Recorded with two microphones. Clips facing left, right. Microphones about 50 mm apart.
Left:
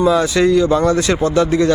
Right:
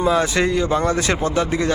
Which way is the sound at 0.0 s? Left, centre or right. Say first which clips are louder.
Left 4 dB; right.